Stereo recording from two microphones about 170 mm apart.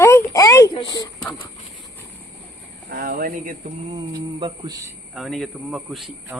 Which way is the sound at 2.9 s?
65° right (ahead or behind).